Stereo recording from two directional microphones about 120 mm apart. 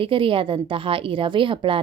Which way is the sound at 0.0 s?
45° right (ahead or behind).